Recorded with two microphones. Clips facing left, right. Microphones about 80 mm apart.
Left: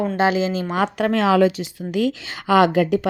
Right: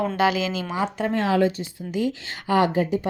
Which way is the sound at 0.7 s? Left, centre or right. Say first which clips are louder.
Left 4 dB; left.